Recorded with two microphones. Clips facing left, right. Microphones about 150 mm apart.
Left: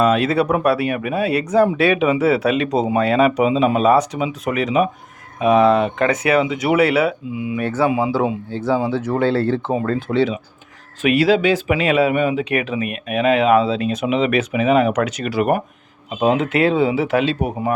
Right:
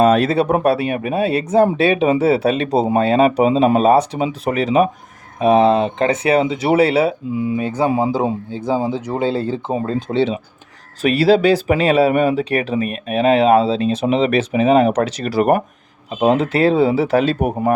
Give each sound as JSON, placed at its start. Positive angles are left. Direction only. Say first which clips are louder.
{"t": 0.0, "sound": "speech", "louder": "right 3 dB", "side_deg": -35}
{"t": 7.6, "sound": "speech", "louder": "left 4 dB", "side_deg": -15}
{"t": 7.9, "sound": "speech", "louder": "right 2 dB", "side_deg": -40}
{"t": 8.4, "sound": "speech", "louder": "even", "side_deg": -15}